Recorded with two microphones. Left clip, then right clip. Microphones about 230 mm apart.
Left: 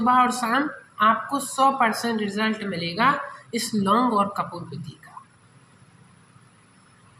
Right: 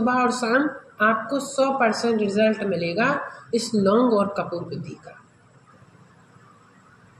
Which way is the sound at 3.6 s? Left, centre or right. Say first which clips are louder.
Right 1 dB; left.